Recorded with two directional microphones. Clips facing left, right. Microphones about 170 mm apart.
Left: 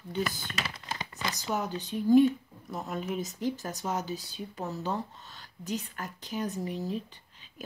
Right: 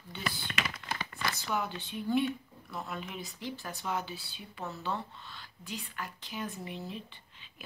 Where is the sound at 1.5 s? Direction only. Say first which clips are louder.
Left 3 dB; 40° left (ahead or behind).